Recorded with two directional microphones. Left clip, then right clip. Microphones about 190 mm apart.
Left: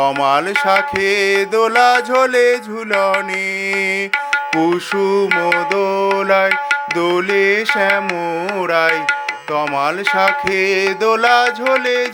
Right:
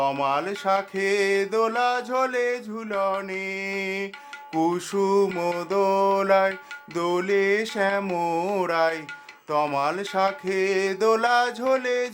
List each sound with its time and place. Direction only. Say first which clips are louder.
0.0 s music: left 9 dB; 25° left (ahead or behind)
4.1 s tabla: left 15 dB; 50° left (ahead or behind)
4.6 s music: left 8 dB; 15° left (ahead or behind)